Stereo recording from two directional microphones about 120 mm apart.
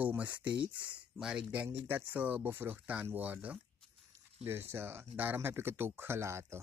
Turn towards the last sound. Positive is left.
turn(degrees=-25)  # may be behind; listen again after turning